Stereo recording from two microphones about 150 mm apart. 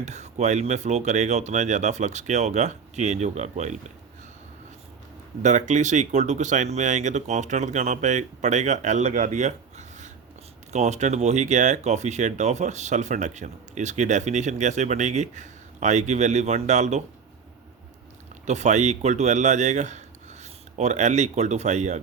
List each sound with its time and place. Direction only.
0.0 s speech: 50° right (ahead or behind)
5.4 s speech: 55° right (ahead or behind)
18.4 s speech: 50° right (ahead or behind)